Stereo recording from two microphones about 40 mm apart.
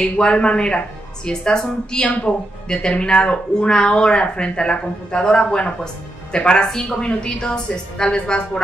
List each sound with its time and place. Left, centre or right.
0.0 s speech: left